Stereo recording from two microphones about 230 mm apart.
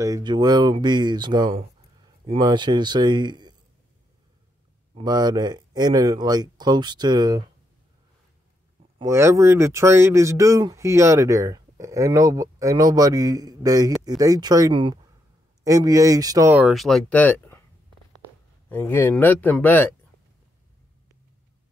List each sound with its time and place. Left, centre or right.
0.0 s speech: centre
4.9 s speech: centre
8.9 s speech: centre
18.7 s speech: centre